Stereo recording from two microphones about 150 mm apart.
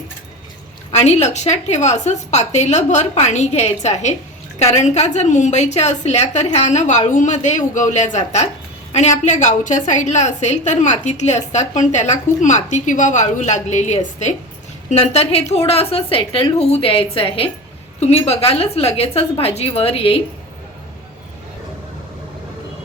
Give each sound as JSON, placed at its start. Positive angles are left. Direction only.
{"t": 0.9, "sound": "a woman's voice", "side_deg": 45}